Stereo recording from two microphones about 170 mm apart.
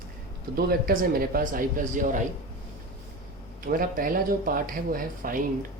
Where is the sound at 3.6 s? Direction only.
55° right (ahead or behind).